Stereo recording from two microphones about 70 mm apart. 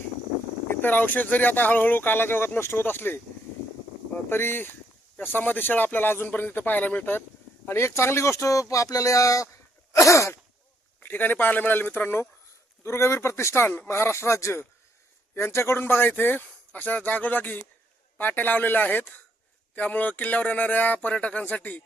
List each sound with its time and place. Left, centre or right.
0.8 s speech: left
4.3 s speech: left
7.7 s speech: left
9.9 s sneeze: left
11.0 s speech: left